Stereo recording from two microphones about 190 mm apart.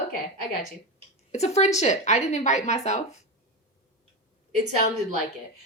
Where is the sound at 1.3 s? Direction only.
35° left (ahead or behind).